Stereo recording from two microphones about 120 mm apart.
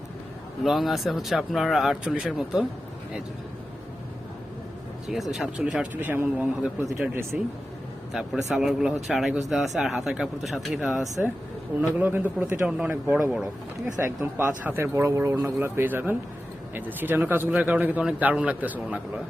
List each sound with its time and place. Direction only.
0.6 s speech: centre (ahead or behind)
5.0 s a man's voice: centre (ahead or behind)